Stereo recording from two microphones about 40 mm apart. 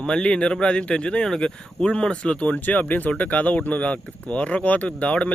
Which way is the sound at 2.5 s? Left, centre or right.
Left.